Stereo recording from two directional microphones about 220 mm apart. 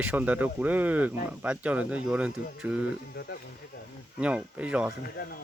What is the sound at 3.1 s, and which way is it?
Speech, 45° left (ahead or behind).